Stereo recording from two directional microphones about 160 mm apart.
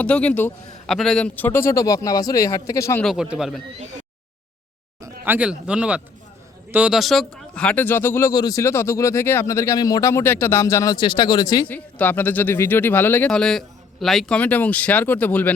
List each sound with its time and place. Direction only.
0.0 s speech: 10° left (ahead or behind)
3.0 s a man's voice: centre (ahead or behind)
4.9 s speech: 15° right (ahead or behind); by 11.7 s 25° left (ahead or behind)
11.7 s speech: 10° left (ahead or behind)